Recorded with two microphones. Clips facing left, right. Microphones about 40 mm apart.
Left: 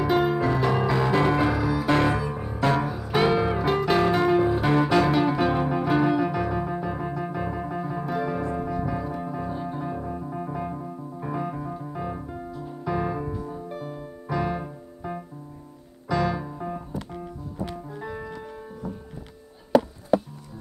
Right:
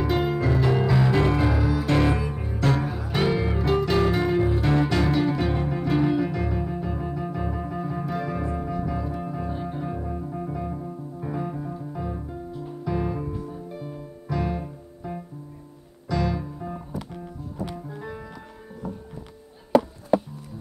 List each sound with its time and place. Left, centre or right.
0.0 s music: centre
13.7 s music: left
14.3 s music: centre
16.4 s music: left
17.6 s music: centre